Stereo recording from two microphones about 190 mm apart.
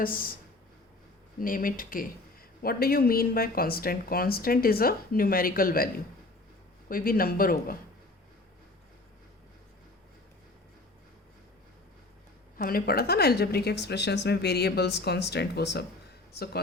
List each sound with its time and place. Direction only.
0.0 s speech: 50° left (ahead or behind)
1.4 s speech: 45° left (ahead or behind)
12.5 s a woman's voice: 50° left (ahead or behind)